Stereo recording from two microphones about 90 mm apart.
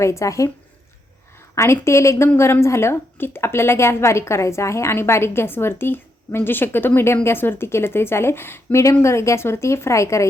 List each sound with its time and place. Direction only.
0.0 s speech: 35° left (ahead or behind)
1.5 s a woman's voice: 30° left (ahead or behind)